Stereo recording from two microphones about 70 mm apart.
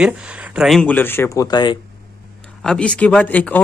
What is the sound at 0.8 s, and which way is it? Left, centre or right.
Speech, left.